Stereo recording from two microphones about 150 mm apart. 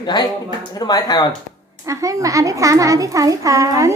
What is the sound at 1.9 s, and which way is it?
A child's voice, 20° right (ahead or behind).